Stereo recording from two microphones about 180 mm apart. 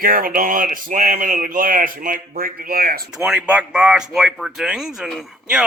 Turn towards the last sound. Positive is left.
turn(degrees=0)  # may be behind; listen again after turning